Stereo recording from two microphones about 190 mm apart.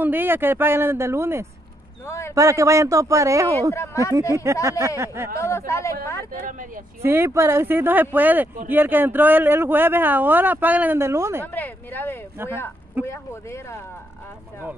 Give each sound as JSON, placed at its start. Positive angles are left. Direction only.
{"t": 0.0, "sound": "speech", "side_deg": -10}
{"t": 2.0, "sound": "a sound", "side_deg": 15}
{"t": 2.3, "sound": "speech", "side_deg": -15}
{"t": 3.7, "sound": "speech", "side_deg": 15}
{"t": 4.6, "sound": "speech", "side_deg": -15}
{"t": 5.4, "sound": "speech", "side_deg": 15}
{"t": 6.3, "sound": "speech", "side_deg": -45}
{"t": 7.0, "sound": "speech", "side_deg": -10}
{"t": 11.4, "sound": "speech", "side_deg": 10}